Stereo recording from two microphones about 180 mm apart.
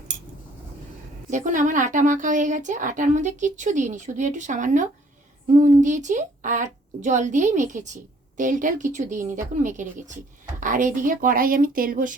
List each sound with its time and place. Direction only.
1.3 s a woman's voice: 45° right (ahead or behind)